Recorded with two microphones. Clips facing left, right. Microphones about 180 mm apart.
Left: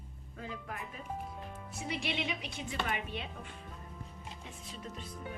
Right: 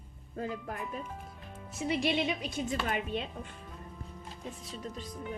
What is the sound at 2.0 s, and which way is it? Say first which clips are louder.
Speech: right 7 dB; 40° right (ahead or behind).